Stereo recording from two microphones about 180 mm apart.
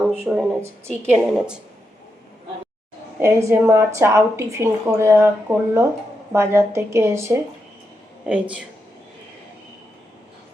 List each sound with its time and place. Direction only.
0.3 s a woman's voice: 10° right (ahead or behind)
3.2 s a woman's voice: 15° right (ahead or behind)